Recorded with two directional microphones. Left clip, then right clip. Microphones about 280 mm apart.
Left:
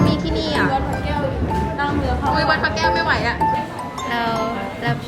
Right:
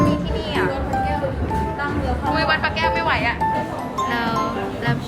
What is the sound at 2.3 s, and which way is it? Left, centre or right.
Music, centre.